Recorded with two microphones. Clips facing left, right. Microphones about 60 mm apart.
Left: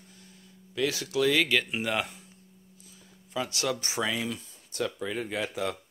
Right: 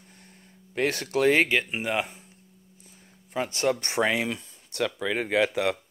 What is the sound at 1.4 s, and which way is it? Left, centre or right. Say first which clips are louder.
Speech: right 2 dB; right.